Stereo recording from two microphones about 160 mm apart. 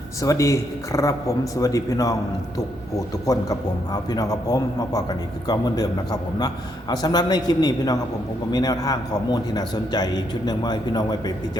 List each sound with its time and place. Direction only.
0.2 s a man's voice: 20° left (ahead or behind)